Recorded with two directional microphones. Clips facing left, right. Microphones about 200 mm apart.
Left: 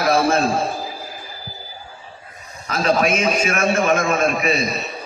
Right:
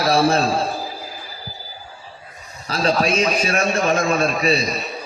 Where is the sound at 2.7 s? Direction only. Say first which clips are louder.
Left 1 dB; 35° right (ahead or behind).